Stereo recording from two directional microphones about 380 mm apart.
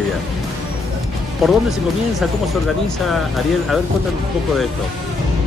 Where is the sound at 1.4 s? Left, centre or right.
Centre.